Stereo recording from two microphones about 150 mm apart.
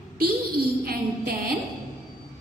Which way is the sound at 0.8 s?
90° right.